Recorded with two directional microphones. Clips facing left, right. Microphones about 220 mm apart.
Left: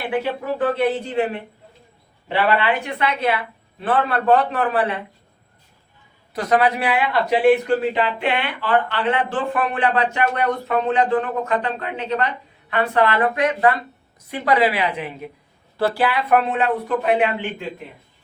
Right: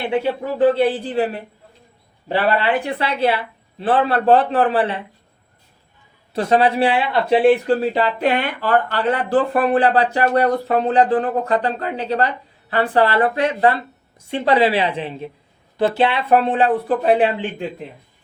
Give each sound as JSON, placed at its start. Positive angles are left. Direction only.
{"t": 0.0, "sound": "speech", "side_deg": -25}
{"t": 6.3, "sound": "a woman's voice", "side_deg": -30}